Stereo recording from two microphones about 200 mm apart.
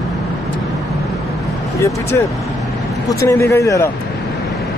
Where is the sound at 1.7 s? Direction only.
15° left (ahead or behind).